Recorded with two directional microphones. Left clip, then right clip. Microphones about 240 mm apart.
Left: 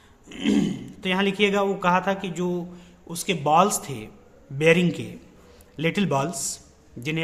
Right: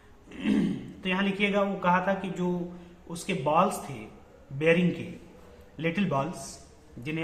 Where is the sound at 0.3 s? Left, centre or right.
Left.